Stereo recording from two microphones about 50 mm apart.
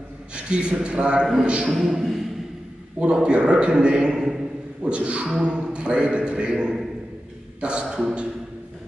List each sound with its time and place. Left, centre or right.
0.3 s a man's voice: centre
1.7 s a man's voice: centre
3.0 s a man's voice: centre